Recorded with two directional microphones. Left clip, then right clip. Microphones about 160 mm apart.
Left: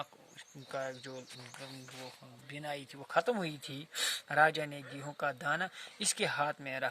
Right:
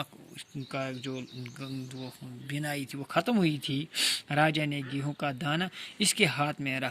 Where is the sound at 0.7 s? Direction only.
35° left (ahead or behind).